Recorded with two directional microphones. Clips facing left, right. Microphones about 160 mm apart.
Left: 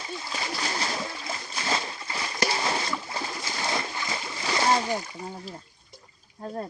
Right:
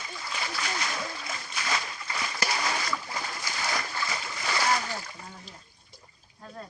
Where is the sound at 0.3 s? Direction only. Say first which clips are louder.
Left 1 dB; 30° left (ahead or behind).